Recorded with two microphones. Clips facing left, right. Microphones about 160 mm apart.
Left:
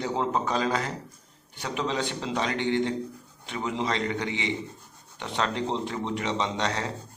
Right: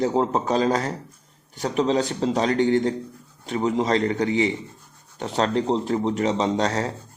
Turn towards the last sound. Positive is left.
turn(degrees=-40)  # may be behind; listen again after turning